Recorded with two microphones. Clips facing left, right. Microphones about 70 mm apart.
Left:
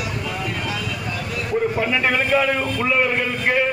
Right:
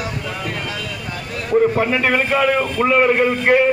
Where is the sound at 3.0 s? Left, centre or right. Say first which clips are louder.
Right 6 dB; right.